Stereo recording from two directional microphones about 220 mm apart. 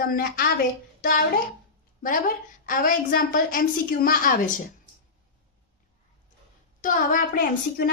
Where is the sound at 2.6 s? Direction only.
40° left (ahead or behind).